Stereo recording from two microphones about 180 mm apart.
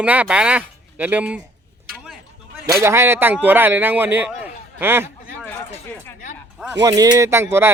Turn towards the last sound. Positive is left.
turn(degrees=-15)  # may be behind; listen again after turning